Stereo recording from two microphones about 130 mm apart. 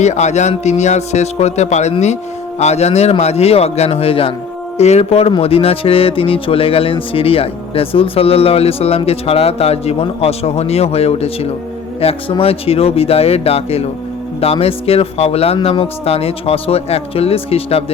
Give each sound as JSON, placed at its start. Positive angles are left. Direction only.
{"t": 0.0, "sound": "speech", "side_deg": 60}
{"t": 4.8, "sound": "speech", "side_deg": 55}
{"t": 15.5, "sound": "speech", "side_deg": 40}